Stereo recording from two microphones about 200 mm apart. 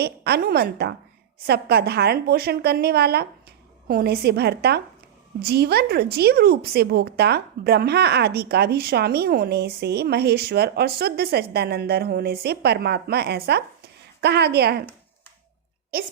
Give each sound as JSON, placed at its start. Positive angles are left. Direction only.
{"t": 0.0, "sound": "a woman's voice", "side_deg": -50}